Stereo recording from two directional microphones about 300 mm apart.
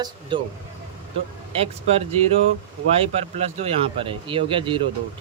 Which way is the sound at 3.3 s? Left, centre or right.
Centre.